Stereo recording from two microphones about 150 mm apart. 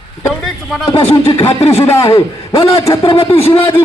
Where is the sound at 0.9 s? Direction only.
35° left (ahead or behind).